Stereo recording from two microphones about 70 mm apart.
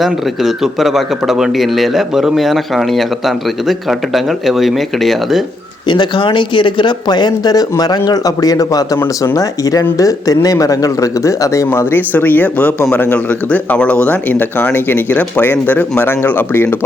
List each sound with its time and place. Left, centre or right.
0.0 s speech: centre
6.8 s speech: left
11.7 s speech: left